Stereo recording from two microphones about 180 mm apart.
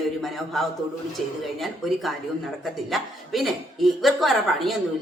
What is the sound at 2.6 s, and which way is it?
Speech, centre (ahead or behind).